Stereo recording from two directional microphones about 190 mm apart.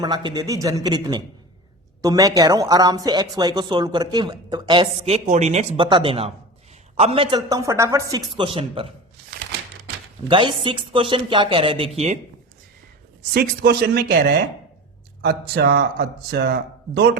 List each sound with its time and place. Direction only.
0.0 s speech: 20° right (ahead or behind)
10.2 s speech: 25° right (ahead or behind)
13.3 s a man's voice: 55° right (ahead or behind)